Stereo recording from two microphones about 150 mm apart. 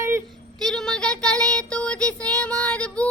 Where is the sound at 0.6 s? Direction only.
5° left (ahead or behind).